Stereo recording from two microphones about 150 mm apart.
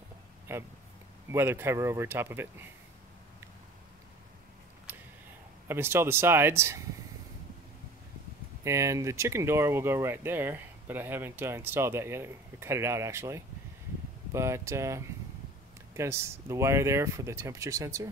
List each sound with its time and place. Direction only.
0.5 s speech: 15° right (ahead or behind)
5.7 s speech: 15° right (ahead or behind)
8.6 s speech: 20° right (ahead or behind)